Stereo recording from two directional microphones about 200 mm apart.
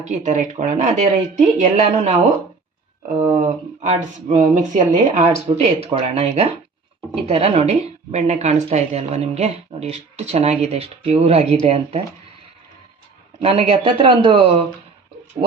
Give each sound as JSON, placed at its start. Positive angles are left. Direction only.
{"t": 0.0, "sound": "speech", "side_deg": -35}
{"t": 13.4, "sound": "speech", "side_deg": -30}